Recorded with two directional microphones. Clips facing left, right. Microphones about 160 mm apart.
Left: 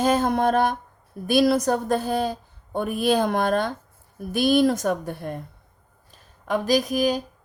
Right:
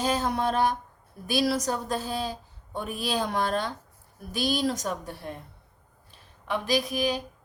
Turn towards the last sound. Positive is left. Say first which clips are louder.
# left 5 dB
turn(degrees=45)  # may be behind; listen again after turning